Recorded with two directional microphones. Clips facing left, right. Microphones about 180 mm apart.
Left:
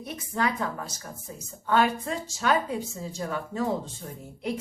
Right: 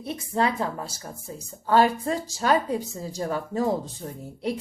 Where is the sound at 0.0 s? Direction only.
30° right (ahead or behind).